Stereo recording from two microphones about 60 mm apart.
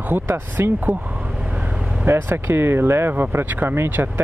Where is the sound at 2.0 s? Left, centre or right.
Right.